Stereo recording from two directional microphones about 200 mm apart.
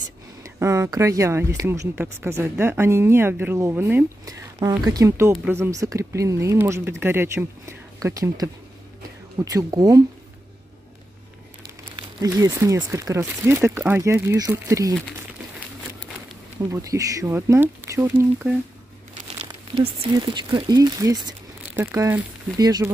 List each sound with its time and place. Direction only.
0.4 s speech: 15° right (ahead or behind)
12.4 s speech: 15° right (ahead or behind)
16.7 s speech: 15° right (ahead or behind)
19.8 s speech: 25° right (ahead or behind)